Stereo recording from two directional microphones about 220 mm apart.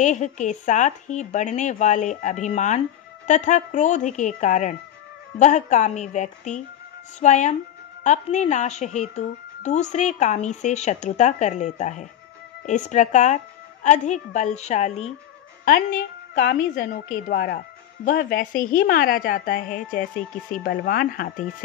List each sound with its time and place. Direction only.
0.0 s speech: 35° left (ahead or behind)